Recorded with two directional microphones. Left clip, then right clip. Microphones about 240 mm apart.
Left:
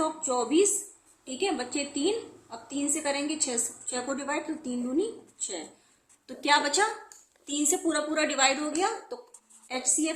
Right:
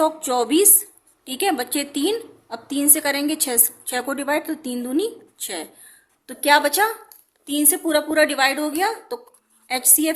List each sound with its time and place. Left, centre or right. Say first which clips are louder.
0.0 s a woman's voice: right 9 dB; right
6.2 s speech: right 8 dB; right